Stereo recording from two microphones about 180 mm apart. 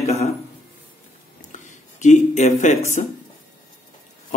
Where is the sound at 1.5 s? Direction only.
45° left (ahead or behind).